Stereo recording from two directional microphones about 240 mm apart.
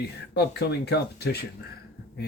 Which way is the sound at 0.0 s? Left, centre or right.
Left.